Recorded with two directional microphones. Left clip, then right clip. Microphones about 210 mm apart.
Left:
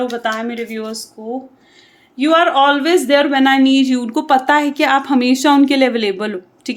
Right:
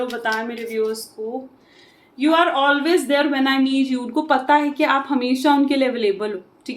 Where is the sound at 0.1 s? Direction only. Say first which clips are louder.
Left 3 dB; 50° left (ahead or behind).